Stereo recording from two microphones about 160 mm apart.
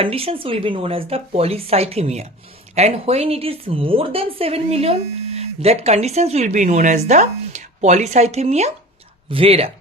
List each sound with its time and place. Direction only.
0.0 s a woman's voice: 35° right (ahead or behind)